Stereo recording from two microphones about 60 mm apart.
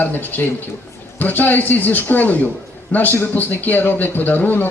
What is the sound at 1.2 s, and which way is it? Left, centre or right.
Speech, left.